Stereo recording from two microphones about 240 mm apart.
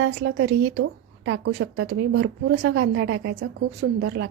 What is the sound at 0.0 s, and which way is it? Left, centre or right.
A woman's voice, right.